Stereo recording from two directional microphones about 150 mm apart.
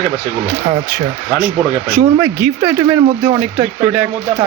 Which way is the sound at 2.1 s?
15° right (ahead or behind).